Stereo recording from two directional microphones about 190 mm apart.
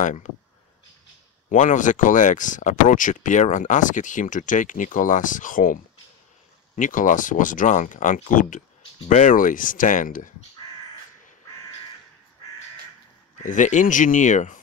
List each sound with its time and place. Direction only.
0.0 s speech: 40° left (ahead or behind)
1.5 s speech: 40° left (ahead or behind)
13.4 s speech: 40° left (ahead or behind)